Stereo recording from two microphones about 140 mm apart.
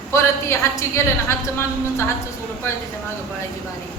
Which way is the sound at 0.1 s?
20° left (ahead or behind).